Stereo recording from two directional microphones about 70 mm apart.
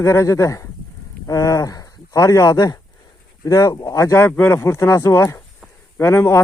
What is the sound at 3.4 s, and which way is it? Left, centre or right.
Speech, left.